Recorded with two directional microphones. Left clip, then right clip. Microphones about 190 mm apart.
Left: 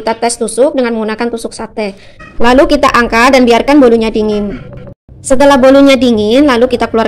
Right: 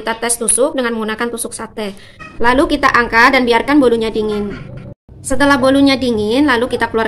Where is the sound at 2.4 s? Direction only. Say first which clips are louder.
Left 6 dB; 40° left (ahead or behind).